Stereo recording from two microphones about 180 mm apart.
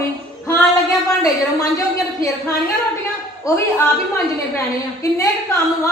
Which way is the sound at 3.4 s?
15° left (ahead or behind).